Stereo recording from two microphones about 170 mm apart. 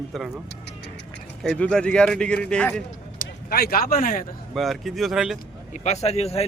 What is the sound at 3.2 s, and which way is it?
Speech, 65° left (ahead or behind).